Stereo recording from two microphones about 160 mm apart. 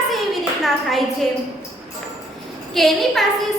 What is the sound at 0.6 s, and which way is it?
Speech, centre (ahead or behind).